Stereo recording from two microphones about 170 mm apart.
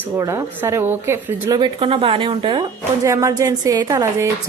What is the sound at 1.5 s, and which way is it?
Speech, 30° right (ahead or behind).